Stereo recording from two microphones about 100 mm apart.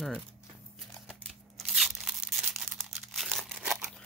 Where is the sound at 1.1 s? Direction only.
Centre (ahead or behind).